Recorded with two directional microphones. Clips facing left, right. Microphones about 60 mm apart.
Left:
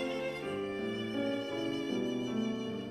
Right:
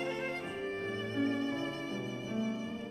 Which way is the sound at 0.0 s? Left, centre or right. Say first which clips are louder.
Left 1 dB; right.